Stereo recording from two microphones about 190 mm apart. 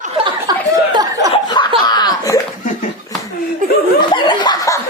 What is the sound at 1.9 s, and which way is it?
Laughter, 20° left (ahead or behind).